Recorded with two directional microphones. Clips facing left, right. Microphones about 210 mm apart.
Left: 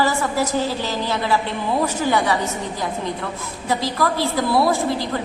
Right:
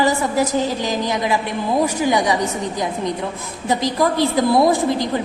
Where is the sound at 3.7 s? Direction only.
20° right (ahead or behind).